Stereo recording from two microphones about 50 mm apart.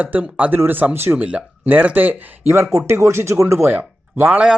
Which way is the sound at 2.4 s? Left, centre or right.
Right.